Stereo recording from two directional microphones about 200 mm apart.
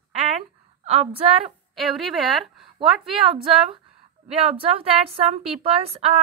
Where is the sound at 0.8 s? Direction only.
30° right (ahead or behind).